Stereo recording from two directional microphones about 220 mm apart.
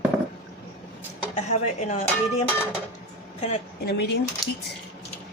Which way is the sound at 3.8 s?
45° left (ahead or behind).